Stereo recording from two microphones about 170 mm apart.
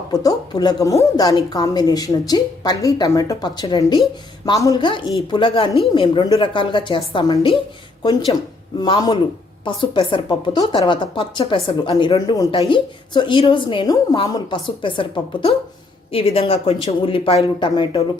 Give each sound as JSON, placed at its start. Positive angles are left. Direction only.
{"t": 0.1, "sound": "speech", "side_deg": 20}
{"t": 8.8, "sound": "speech", "side_deg": 25}